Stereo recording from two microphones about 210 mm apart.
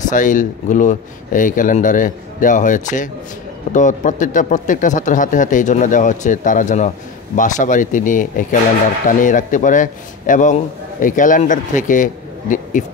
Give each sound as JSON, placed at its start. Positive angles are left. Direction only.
{"t": 0.0, "sound": "a man's voice", "side_deg": 40}